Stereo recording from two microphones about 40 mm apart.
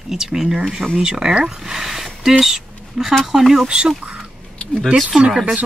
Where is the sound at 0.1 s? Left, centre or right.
Centre.